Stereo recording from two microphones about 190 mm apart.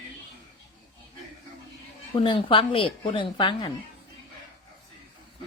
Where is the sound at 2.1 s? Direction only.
25° left (ahead or behind).